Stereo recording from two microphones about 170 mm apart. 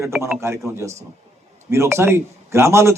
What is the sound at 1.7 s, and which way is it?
A man's voice, 15° right (ahead or behind).